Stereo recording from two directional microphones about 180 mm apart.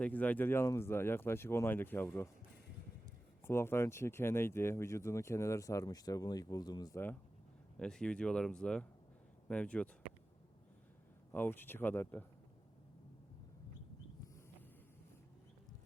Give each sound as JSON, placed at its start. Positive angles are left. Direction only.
{"t": 0.0, "sound": "speech", "side_deg": 10}
{"t": 3.4, "sound": "speech", "side_deg": 15}
{"t": 11.3, "sound": "speech", "side_deg": 10}